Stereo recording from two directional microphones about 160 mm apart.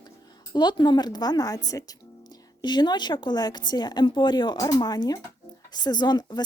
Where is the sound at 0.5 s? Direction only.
30° left (ahead or behind).